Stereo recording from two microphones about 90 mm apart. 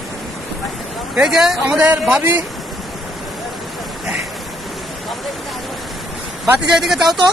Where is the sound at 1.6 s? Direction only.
15° right (ahead or behind).